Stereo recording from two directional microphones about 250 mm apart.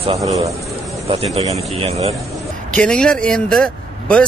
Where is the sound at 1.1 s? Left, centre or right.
Right.